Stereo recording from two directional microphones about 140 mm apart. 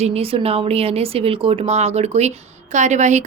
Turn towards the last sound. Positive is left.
turn(degrees=-55)  # may be behind; listen again after turning